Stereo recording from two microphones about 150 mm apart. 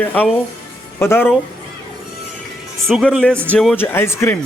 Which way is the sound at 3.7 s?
15° left (ahead or behind).